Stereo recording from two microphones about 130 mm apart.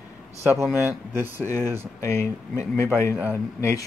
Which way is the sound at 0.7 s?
15° right (ahead or behind).